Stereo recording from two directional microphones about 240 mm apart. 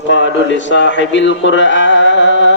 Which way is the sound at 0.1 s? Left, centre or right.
Left.